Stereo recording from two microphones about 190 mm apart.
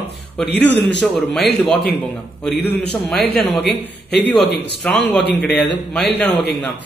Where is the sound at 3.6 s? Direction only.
60° left (ahead or behind).